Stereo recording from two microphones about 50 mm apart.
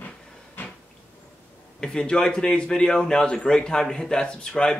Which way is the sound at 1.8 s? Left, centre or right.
Centre.